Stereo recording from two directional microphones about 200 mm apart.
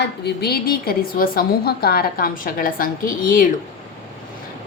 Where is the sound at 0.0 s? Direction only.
50° left (ahead or behind).